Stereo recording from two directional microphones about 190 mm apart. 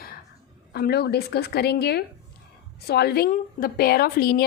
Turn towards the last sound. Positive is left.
turn(degrees=55)  # may be behind; listen again after turning